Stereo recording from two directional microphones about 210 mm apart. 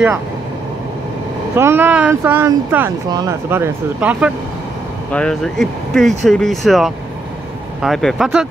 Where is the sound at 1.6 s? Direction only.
10° right (ahead or behind).